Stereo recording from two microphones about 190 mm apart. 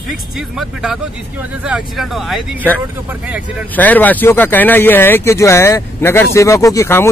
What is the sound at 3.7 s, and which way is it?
Speech, 10° left (ahead or behind).